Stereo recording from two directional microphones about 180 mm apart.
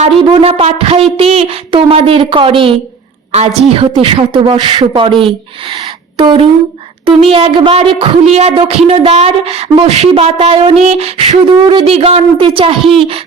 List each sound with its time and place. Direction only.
0.2 s a woman's voice: 30° right (ahead or behind)